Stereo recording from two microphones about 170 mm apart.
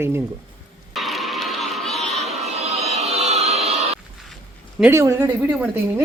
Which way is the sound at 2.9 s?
40° right (ahead or behind).